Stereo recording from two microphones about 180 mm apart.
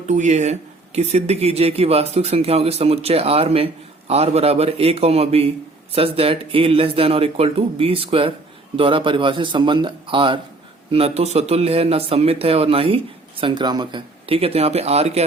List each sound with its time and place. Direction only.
0.1 s a man's voice: 40° right (ahead or behind)